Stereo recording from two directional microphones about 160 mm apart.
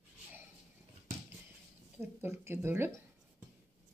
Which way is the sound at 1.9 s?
15° right (ahead or behind).